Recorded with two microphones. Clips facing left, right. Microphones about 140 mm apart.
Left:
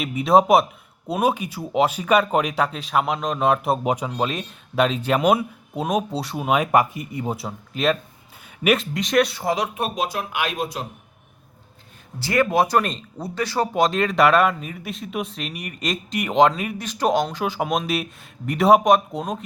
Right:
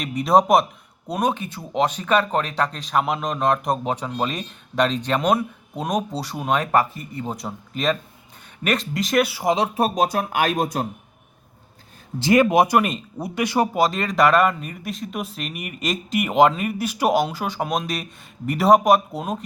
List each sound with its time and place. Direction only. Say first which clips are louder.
0.0 s speech: left 1 dB; 5° left (ahead or behind)
9.7 s speech: right 5 dB; 40° right (ahead or behind)
12.2 s speech: right 3 dB; 20° right (ahead or behind)
13.7 s speech: left 1 dB; centre (ahead or behind)